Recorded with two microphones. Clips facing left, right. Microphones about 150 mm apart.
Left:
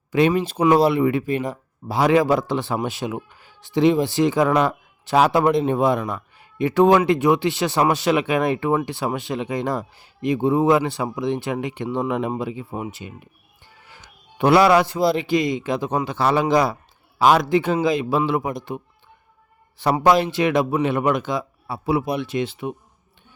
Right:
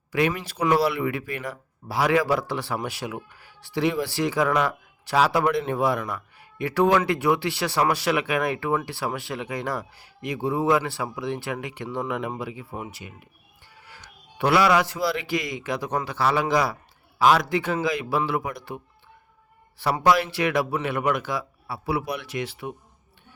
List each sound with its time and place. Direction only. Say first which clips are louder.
0.1 s speech: left 6 dB; 25° left (ahead or behind)
19.8 s speech: left 4 dB; 20° left (ahead or behind)